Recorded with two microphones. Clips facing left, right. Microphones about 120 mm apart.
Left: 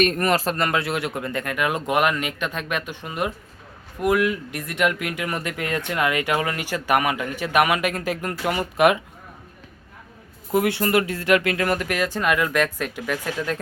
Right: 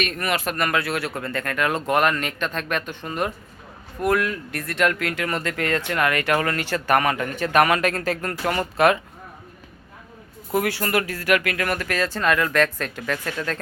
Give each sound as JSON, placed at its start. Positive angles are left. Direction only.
{"t": 0.0, "sound": "speech", "side_deg": 40}
{"t": 10.5, "sound": "speech", "side_deg": 20}